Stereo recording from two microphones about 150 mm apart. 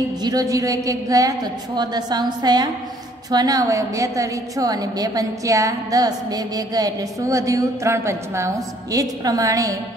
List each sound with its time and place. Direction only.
0.2 s a woman's voice: 25° right (ahead or behind)